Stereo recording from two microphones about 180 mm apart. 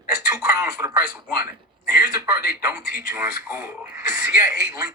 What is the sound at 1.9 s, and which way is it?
A man's voice, 55° left (ahead or behind).